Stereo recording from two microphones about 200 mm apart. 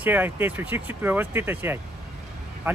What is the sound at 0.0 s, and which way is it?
Speech, 10° right (ahead or behind).